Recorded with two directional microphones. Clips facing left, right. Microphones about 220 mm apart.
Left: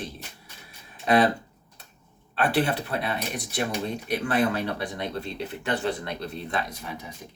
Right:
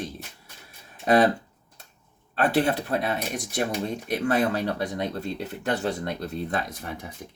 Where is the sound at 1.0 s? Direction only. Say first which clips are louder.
Right 1 dB; 45° right (ahead or behind).